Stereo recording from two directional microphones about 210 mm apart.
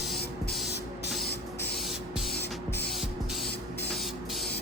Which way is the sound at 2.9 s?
Centre (ahead or behind).